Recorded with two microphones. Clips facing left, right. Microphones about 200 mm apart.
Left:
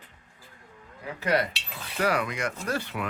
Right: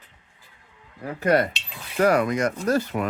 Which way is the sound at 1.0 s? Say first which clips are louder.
Right 6 dB; 50° right (ahead or behind).